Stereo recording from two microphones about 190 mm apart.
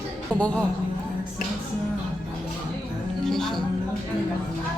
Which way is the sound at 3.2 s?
Centre (ahead or behind).